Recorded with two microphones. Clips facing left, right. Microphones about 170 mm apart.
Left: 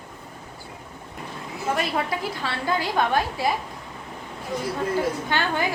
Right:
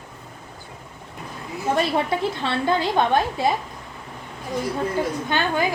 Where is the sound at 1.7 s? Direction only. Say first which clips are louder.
Right 4 dB; 25° right (ahead or behind).